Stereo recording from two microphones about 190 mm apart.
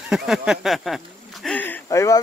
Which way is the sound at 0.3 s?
Centre (ahead or behind).